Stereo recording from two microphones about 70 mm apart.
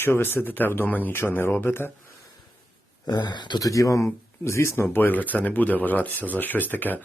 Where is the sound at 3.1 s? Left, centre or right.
Left.